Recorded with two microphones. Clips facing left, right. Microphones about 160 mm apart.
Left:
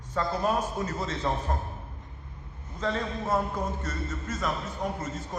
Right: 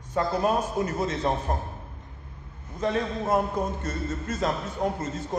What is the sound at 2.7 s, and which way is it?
A man's voice, 15° right (ahead or behind).